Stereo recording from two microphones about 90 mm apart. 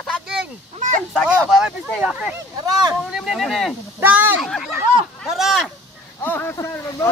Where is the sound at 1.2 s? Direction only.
10° right (ahead or behind).